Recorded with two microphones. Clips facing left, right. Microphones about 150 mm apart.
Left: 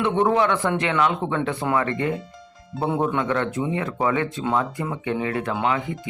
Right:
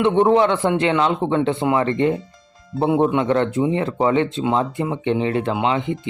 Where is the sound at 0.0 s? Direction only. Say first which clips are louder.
Right 5 dB; 30° right (ahead or behind).